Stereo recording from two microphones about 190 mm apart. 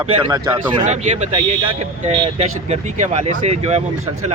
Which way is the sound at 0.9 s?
35° right (ahead or behind).